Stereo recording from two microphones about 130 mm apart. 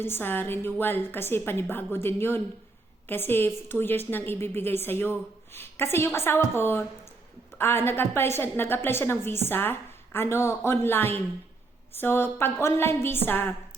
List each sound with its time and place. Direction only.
0.0 s a woman's voice: 15° left (ahead or behind)